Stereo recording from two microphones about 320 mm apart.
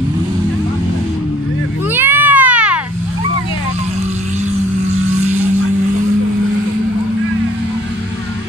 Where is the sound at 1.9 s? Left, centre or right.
Centre.